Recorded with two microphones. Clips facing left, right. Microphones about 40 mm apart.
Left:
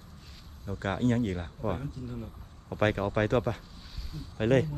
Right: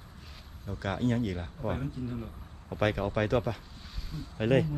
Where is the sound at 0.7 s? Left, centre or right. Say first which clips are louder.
Left 2 dB; left.